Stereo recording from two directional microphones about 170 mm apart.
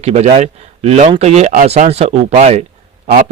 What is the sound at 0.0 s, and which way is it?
A man's voice, 40° right (ahead or behind).